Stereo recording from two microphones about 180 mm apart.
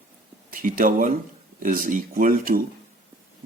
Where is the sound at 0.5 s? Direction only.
50° right (ahead or behind).